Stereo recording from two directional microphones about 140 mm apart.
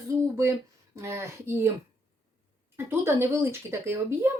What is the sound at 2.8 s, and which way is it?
Speech, 15° right (ahead or behind).